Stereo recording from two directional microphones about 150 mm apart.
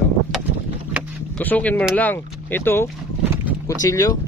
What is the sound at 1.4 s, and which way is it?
Speech, 10° left (ahead or behind).